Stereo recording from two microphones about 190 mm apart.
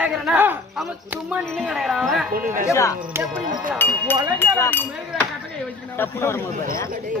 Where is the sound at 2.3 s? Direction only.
45° right (ahead or behind).